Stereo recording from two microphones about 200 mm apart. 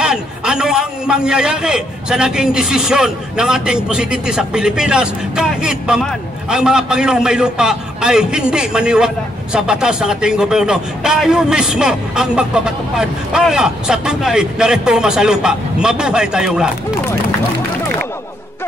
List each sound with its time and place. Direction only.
0.0 s a man's voice: 5° right (ahead or behind)